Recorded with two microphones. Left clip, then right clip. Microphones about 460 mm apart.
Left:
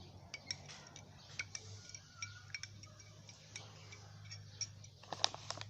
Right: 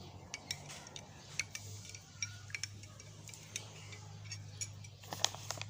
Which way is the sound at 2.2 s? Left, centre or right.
Left.